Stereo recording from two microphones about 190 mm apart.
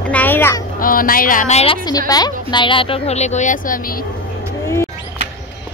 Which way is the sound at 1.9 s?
20° left (ahead or behind).